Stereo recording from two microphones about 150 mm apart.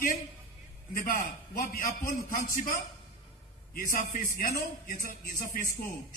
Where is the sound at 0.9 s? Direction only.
65° left (ahead or behind).